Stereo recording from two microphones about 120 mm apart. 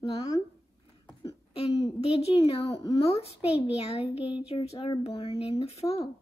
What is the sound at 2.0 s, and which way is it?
A woman's voice, 55° left (ahead or behind).